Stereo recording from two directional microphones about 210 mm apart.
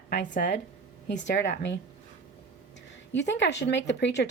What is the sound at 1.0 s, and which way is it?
Speech, 55° left (ahead or behind).